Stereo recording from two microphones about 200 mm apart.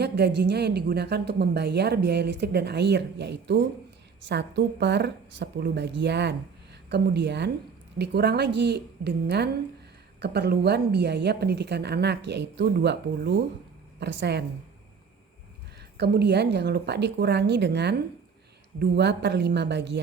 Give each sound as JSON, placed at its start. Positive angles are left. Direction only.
{"t": 0.0, "sound": "speech", "side_deg": -55}
{"t": 16.0, "sound": "speech", "side_deg": -55}